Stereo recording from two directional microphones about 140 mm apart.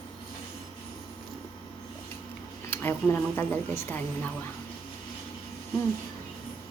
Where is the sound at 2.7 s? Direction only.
15° left (ahead or behind).